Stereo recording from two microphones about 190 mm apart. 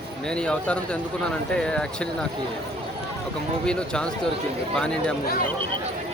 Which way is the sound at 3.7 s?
5° left (ahead or behind).